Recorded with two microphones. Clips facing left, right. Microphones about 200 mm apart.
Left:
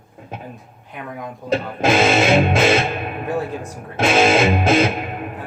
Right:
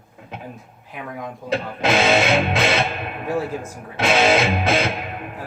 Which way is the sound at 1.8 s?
50° left (ahead or behind).